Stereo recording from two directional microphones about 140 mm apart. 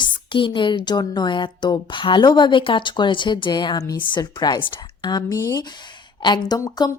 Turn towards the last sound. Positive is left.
turn(degrees=25)  # may be behind; listen again after turning